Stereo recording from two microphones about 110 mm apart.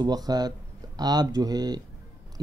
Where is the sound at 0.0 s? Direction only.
35° right (ahead or behind).